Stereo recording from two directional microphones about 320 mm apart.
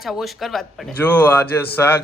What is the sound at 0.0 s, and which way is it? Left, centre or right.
A man's voice, centre.